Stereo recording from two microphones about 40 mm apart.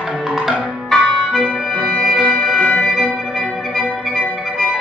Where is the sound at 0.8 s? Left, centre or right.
Centre.